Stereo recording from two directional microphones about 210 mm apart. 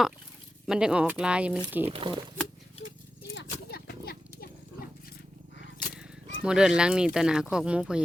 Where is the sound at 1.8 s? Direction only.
25° right (ahead or behind).